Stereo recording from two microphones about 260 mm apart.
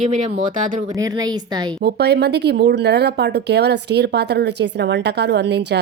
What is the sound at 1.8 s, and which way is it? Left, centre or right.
Speech, right.